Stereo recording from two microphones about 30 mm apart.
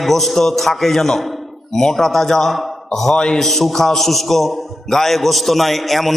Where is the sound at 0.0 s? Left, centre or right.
Centre.